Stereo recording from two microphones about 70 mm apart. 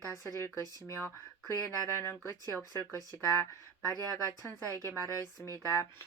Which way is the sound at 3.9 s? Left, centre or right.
Right.